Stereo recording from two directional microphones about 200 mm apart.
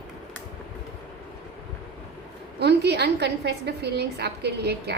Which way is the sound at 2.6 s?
55° right (ahead or behind).